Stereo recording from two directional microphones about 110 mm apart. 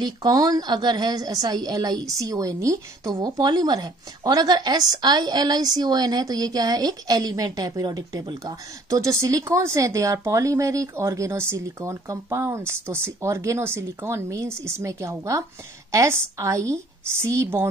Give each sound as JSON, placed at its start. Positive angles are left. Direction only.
{"t": 0.0, "sound": "a woman's voice", "side_deg": -40}